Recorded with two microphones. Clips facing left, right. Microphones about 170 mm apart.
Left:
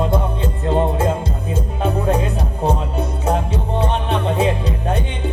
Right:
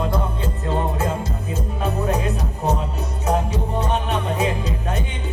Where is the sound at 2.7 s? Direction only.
30° left (ahead or behind).